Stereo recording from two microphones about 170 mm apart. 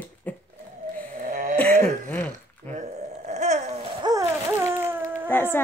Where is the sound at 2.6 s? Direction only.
45° right (ahead or behind).